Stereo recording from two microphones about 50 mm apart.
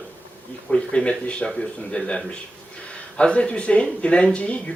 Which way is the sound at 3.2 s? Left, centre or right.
Left.